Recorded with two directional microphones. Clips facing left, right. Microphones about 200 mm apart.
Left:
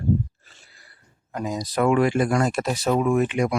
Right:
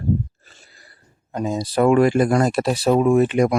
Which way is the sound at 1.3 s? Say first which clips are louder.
Right 4 dB; 25° right (ahead or behind).